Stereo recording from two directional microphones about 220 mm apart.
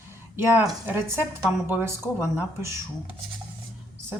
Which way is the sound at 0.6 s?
10° right (ahead or behind).